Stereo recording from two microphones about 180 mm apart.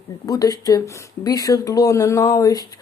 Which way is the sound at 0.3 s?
20° left (ahead or behind).